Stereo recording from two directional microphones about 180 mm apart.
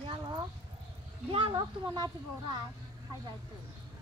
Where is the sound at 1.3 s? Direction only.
30° right (ahead or behind).